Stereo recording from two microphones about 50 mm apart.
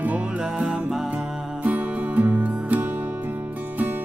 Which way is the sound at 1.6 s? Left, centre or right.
Right.